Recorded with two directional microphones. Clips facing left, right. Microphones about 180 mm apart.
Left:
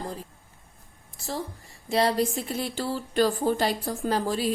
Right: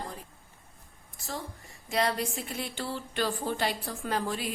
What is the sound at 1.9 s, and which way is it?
Speech, 30° left (ahead or behind).